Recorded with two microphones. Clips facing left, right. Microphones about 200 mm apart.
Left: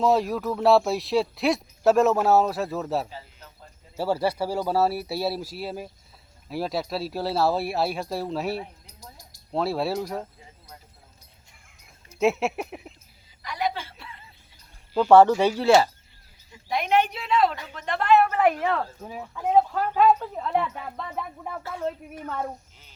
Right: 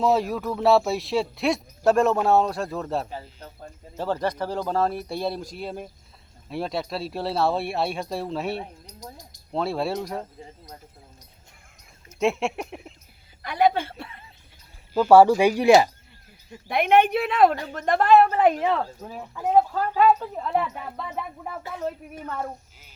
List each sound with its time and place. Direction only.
0.0 s speech: centre (ahead or behind)
12.2 s speech: centre (ahead or behind)
13.4 s a woman's voice: 55° right (ahead or behind)
14.9 s speech: 5° right (ahead or behind)
16.5 s speech: 60° right (ahead or behind)
17.6 s speech: 40° right (ahead or behind); by 18.8 s 20° right (ahead or behind)
19.0 s speech: centre (ahead or behind)
22.3 s speech: centre (ahead or behind)